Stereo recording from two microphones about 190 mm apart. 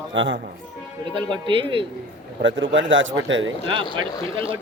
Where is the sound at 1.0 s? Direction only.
25° right (ahead or behind).